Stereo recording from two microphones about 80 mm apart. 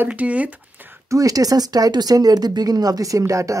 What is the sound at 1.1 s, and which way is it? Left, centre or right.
Speech, right.